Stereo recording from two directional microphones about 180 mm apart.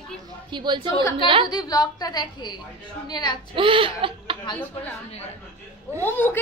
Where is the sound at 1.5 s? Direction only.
20° left (ahead or behind).